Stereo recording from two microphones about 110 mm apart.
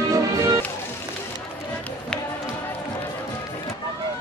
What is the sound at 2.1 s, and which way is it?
Run, 5° left (ahead or behind).